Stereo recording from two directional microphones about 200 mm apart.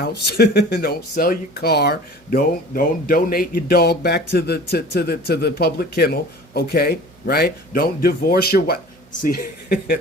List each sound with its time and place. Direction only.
0.0 s speech: 55° left (ahead or behind)